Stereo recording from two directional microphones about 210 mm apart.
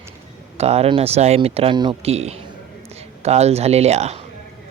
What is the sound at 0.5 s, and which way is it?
Speech, 30° right (ahead or behind).